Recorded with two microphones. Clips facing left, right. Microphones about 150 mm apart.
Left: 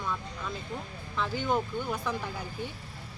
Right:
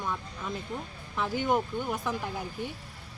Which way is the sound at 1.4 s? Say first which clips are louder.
Right 2 dB; 15° right (ahead or behind).